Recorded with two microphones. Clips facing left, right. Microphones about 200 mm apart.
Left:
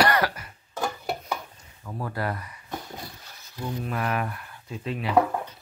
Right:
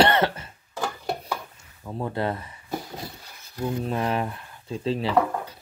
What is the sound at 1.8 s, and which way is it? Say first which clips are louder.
Speech: right 3 dB; 25° right (ahead or behind).